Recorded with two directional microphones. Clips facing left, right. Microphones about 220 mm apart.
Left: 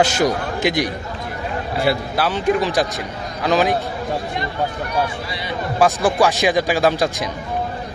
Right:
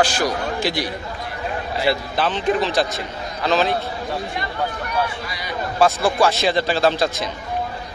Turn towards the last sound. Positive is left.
turn(degrees=15)  # may be behind; listen again after turning